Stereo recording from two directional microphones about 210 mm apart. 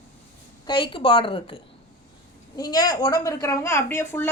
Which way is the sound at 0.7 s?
25° left (ahead or behind).